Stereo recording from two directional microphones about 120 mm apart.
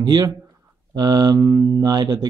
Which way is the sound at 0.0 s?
30° right (ahead or behind).